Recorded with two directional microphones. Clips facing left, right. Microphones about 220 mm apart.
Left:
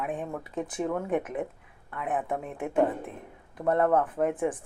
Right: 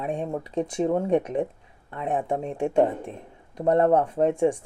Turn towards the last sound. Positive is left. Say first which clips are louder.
# right 5 dB
turn(degrees=-25)  # may be behind; listen again after turning